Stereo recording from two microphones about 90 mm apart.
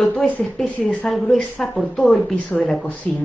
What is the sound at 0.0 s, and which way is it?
A woman's voice, 10° left (ahead or behind).